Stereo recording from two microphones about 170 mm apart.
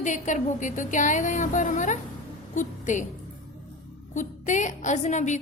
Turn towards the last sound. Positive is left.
turn(degrees=45)  # may be behind; listen again after turning